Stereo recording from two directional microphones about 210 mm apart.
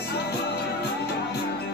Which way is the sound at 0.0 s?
50° left (ahead or behind).